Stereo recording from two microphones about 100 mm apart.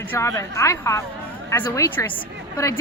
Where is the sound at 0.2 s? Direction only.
30° left (ahead or behind).